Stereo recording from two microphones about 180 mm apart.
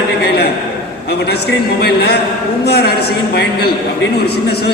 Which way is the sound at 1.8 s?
60° left (ahead or behind).